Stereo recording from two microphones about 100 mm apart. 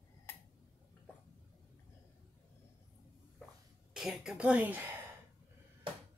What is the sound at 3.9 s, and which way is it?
Speech, 5° right (ahead or behind).